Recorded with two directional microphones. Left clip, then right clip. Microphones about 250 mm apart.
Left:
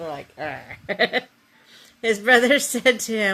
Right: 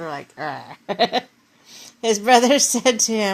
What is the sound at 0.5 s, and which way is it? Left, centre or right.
Speech, centre.